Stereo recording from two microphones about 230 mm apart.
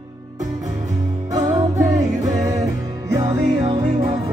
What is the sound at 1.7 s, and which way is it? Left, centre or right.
Music, centre.